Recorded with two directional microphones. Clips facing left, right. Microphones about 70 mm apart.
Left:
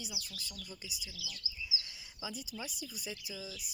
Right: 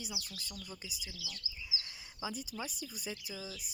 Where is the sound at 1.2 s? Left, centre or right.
Right.